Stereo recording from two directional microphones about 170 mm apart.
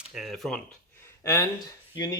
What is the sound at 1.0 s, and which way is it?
Speech, 15° left (ahead or behind).